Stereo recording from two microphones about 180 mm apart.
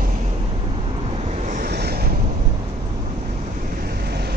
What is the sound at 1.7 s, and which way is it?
Vehicle, 60° right (ahead or behind).